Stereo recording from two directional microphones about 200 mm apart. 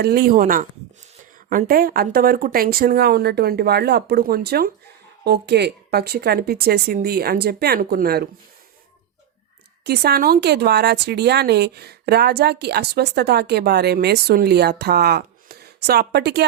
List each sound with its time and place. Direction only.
0.0 s speech: 50° right (ahead or behind)
9.8 s speech: 55° right (ahead or behind)